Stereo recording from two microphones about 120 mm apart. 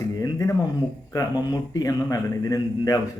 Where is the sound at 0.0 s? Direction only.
25° left (ahead or behind).